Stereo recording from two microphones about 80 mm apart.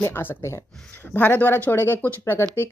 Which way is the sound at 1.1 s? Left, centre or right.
Left.